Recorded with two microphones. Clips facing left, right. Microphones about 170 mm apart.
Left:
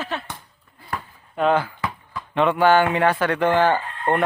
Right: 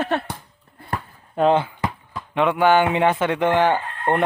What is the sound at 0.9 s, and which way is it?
Speech, 30° right (ahead or behind).